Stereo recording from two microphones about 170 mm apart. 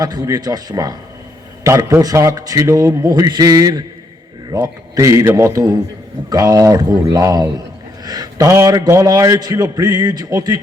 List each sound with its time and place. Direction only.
0.0 s a man's voice: 20° right (ahead or behind)